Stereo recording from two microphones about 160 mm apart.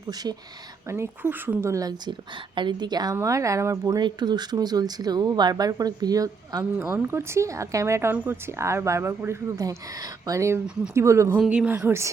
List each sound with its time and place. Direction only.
0.1 s a woman's voice: 25° right (ahead or behind)